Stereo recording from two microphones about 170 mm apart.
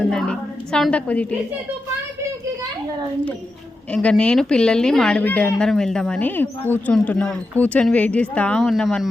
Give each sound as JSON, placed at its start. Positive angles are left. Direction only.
{"t": 0.1, "sound": "a woman's voice", "side_deg": 5}
{"t": 3.9, "sound": "a woman's voice", "side_deg": 5}